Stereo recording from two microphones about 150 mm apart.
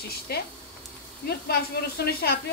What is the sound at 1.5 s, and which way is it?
Speech, 90° left.